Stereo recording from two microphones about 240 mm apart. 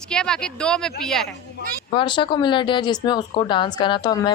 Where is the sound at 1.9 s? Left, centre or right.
Centre.